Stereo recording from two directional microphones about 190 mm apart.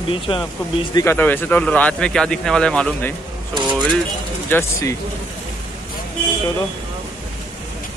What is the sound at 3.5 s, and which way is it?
Speech, 25° right (ahead or behind).